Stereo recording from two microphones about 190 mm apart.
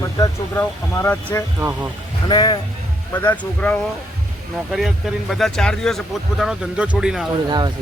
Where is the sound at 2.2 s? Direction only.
25° left (ahead or behind).